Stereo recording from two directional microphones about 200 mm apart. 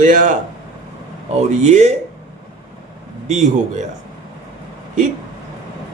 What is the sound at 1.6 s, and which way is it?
Speech, 35° right (ahead or behind).